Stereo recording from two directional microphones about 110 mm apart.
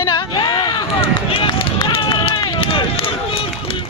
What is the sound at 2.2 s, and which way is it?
Run, 55° left (ahead or behind).